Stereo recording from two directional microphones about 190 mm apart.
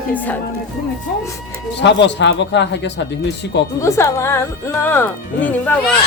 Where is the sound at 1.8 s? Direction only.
70° left (ahead or behind).